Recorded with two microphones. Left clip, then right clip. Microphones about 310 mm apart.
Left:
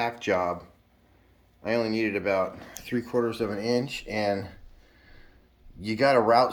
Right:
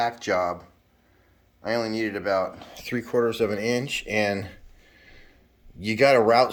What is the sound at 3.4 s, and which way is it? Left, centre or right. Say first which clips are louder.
Speech: right 2 dB; right.